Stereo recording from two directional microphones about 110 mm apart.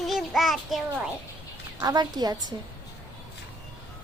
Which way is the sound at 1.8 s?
35° right (ahead or behind).